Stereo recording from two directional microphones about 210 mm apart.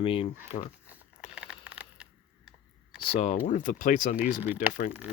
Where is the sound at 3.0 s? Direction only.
30° left (ahead or behind).